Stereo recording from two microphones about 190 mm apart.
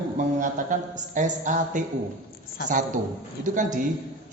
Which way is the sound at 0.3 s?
45° right (ahead or behind).